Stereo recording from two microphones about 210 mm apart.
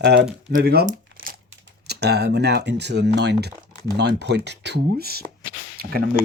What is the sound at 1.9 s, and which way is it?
Speech, 50° right (ahead or behind).